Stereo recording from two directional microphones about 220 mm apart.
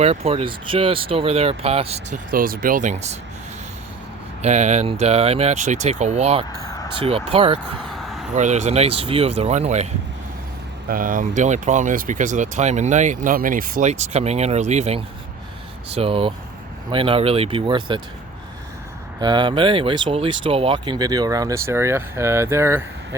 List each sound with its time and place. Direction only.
0.0 s speech: 30° right (ahead or behind)
4.4 s speech: 30° right (ahead or behind)
19.2 s speech: 20° right (ahead or behind)